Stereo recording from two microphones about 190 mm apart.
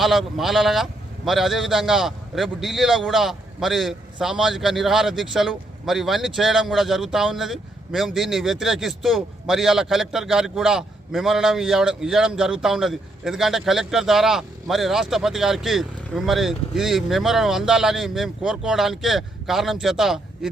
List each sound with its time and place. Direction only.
0.0 s a man's voice: centre (ahead or behind)